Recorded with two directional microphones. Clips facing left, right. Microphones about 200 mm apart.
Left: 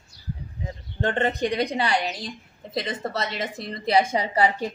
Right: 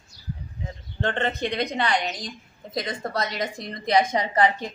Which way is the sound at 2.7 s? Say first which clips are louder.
Left 1 dB; 5° left (ahead or behind).